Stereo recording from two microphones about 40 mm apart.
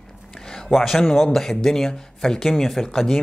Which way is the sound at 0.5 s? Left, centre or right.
Centre.